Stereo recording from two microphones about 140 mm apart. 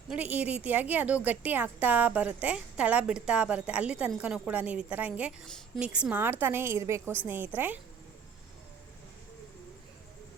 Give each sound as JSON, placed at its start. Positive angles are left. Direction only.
{"t": 0.1, "sound": "a woman's voice", "side_deg": -10}
{"t": 5.5, "sound": "a woman's voice", "side_deg": 5}
{"t": 5.8, "sound": "a woman's voice", "side_deg": -10}